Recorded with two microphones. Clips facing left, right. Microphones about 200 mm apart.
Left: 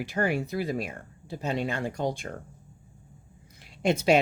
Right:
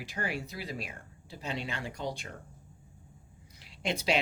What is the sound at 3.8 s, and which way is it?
Speech, 50° left (ahead or behind).